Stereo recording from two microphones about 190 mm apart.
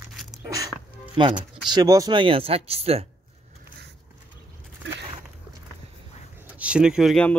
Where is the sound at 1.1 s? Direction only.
25° right (ahead or behind).